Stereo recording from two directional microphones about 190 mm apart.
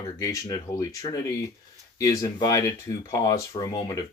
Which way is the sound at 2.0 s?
15° left (ahead or behind).